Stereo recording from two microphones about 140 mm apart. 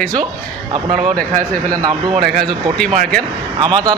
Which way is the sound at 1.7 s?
25° right (ahead or behind).